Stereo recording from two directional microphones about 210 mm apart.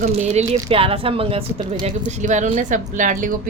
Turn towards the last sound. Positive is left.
turn(degrees=-40)  # may be behind; listen again after turning